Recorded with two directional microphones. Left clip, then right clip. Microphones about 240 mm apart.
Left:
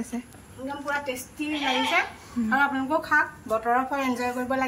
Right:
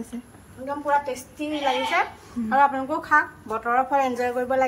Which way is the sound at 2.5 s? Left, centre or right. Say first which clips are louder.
Right 3 dB; centre.